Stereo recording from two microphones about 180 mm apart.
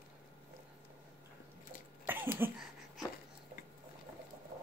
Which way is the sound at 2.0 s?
10° right (ahead or behind).